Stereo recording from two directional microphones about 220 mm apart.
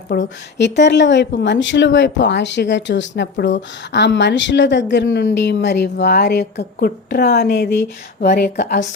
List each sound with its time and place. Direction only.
0.1 s speech: 50° left (ahead or behind)